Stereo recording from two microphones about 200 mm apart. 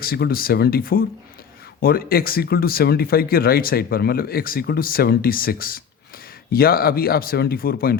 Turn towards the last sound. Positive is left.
turn(degrees=45)  # may be behind; listen again after turning